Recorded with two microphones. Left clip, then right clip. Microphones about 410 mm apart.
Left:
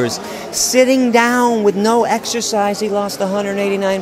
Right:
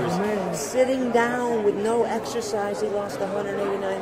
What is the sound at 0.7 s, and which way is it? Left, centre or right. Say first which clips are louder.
Speech: left 10 dB; left.